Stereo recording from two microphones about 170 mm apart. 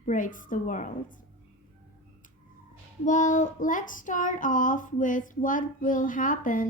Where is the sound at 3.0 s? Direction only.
45° left (ahead or behind).